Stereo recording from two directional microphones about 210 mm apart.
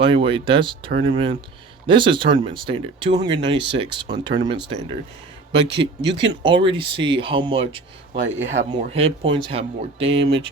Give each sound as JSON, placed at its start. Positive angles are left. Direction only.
{"t": 0.0, "sound": "speech", "side_deg": -25}
{"t": 5.5, "sound": "speech", "side_deg": -55}
{"t": 6.4, "sound": "speech", "side_deg": -25}